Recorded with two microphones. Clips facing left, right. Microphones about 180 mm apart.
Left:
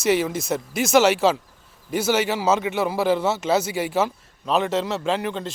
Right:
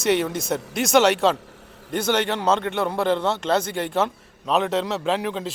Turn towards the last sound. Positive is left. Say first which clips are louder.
# even
turn(degrees=0)  # may be behind; listen again after turning